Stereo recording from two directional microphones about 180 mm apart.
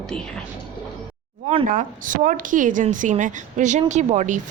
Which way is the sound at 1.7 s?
45° right (ahead or behind).